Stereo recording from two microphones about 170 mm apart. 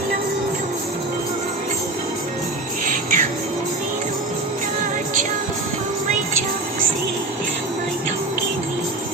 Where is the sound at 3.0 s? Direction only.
50° right (ahead or behind).